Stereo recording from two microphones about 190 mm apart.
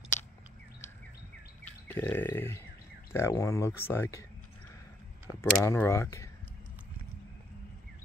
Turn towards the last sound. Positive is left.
turn(degrees=15)  # may be behind; listen again after turning